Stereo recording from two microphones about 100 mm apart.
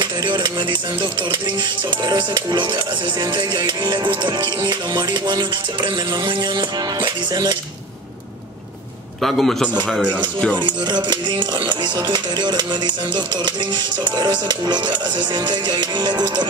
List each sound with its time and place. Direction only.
0.0 s speech: 50° right (ahead or behind)
2.0 s speech: 50° right (ahead or behind)
9.2 s a man's voice: centre (ahead or behind)
10.6 s speech: 50° right (ahead or behind)